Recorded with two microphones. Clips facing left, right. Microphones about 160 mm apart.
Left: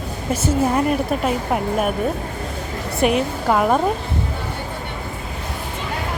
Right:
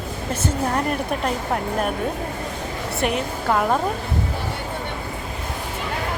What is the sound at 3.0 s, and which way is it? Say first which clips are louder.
Speech: left 6 dB; 15° left (ahead or behind).